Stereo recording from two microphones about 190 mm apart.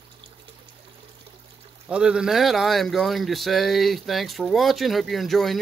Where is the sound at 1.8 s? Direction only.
5° right (ahead or behind).